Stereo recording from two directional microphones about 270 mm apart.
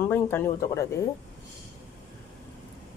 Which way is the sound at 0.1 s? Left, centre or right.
Centre.